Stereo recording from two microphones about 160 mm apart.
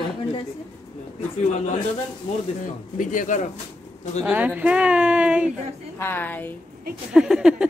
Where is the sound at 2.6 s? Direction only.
55° left (ahead or behind).